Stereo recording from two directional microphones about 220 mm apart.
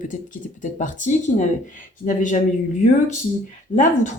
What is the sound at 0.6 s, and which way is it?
Speech, 35° left (ahead or behind).